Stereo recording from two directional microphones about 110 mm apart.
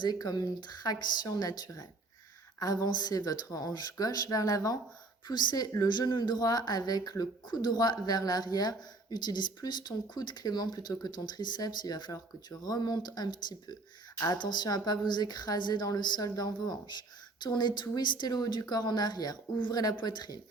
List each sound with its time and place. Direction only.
0.0 s speech: 35° left (ahead or behind)